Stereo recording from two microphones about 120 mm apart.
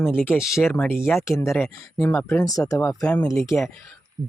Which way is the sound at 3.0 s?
15° left (ahead or behind).